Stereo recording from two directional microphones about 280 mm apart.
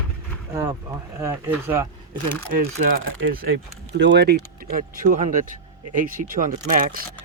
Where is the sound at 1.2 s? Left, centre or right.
Centre.